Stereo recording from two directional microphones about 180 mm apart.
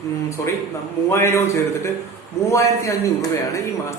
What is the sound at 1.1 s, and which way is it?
A man's voice, 15° left (ahead or behind).